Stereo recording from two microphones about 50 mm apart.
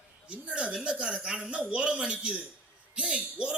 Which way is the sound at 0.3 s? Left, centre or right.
Right.